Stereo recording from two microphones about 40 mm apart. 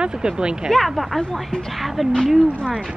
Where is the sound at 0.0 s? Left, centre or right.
Centre.